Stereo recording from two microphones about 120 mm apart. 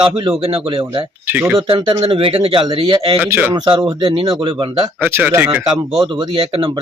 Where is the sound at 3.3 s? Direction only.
15° right (ahead or behind).